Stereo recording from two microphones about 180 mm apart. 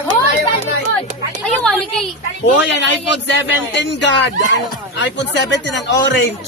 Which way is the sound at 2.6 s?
80° left.